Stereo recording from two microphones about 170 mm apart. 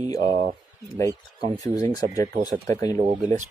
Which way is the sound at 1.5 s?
20° left (ahead or behind).